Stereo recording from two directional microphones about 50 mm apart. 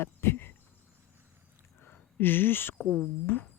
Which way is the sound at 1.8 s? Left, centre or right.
Left.